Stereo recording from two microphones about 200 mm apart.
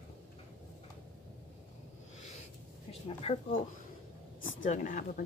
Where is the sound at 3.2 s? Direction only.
30° left (ahead or behind).